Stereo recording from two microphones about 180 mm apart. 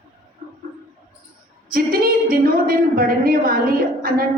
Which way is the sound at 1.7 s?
55° right (ahead or behind).